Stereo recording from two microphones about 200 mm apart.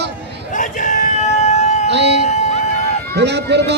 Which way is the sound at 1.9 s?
60° right (ahead or behind).